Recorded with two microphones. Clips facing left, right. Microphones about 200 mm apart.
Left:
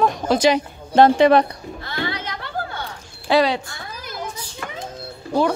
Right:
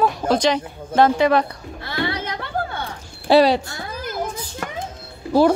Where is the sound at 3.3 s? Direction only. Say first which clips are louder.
Right 4 dB; 35° right (ahead or behind).